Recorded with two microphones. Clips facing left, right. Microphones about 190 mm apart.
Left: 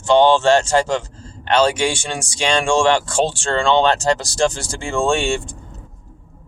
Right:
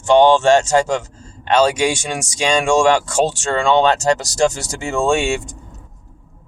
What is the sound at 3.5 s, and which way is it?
Speech, 5° right (ahead or behind).